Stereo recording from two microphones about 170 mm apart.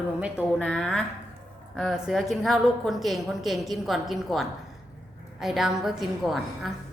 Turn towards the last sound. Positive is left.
turn(degrees=0)  # may be behind; listen again after turning